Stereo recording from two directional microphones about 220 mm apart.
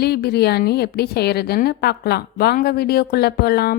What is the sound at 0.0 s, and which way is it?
A woman's voice, 45° left (ahead or behind).